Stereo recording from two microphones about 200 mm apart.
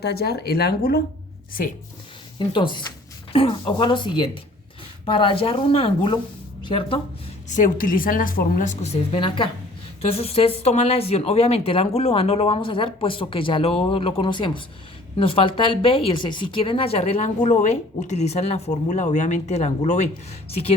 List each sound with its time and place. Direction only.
0.0 s a woman's voice: 50° left (ahead or behind)
2.4 s speech: 25° left (ahead or behind)
7.5 s a woman's voice: 45° left (ahead or behind)